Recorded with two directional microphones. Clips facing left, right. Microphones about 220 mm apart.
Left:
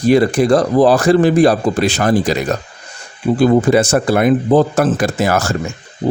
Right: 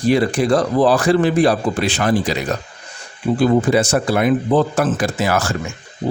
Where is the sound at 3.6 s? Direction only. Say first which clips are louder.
Left 3 dB; 50° left (ahead or behind).